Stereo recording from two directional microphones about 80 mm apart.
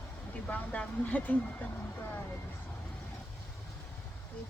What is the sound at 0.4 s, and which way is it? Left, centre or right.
Speech, centre.